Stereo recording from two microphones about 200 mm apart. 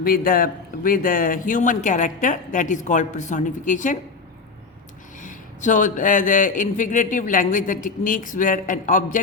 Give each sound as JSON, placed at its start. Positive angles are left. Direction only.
{"t": 0.0, "sound": "a man's voice", "side_deg": 45}
{"t": 5.2, "sound": "a man's voice", "side_deg": 40}